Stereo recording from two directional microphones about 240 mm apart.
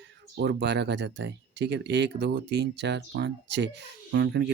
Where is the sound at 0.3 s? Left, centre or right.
Right.